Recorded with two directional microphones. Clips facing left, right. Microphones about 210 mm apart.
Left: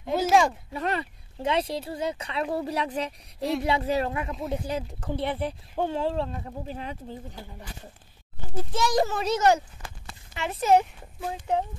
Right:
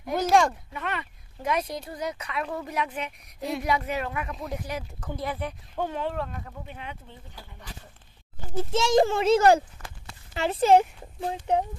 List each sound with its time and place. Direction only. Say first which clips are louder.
0.2 s a sound: even; 5° left (ahead or behind)
0.7 s speech: left 4 dB; 35° left (ahead or behind)
7.4 s speech: left 5 dB; 25° left (ahead or behind)
8.7 s speech: right 4 dB; 25° right (ahead or behind)